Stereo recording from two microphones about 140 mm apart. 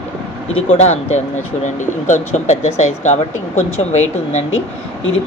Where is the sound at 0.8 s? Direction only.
55° left (ahead or behind).